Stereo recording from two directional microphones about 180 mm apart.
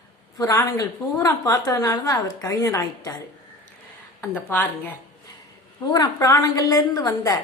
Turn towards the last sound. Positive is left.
turn(degrees=20)  # may be behind; listen again after turning